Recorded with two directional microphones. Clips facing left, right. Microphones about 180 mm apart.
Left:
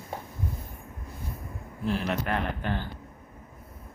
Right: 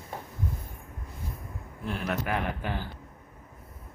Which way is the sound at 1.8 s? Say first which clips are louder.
Left 3 dB; centre (ahead or behind).